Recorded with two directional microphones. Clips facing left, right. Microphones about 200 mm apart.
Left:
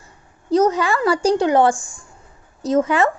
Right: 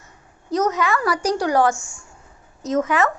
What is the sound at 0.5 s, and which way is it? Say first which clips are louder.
A woman's voice: left 4 dB; 30° left (ahead or behind).